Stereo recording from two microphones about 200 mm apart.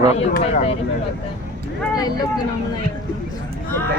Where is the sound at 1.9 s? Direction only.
20° left (ahead or behind).